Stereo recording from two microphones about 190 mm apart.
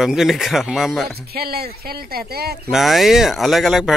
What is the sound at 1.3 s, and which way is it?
Speech, 55° right (ahead or behind).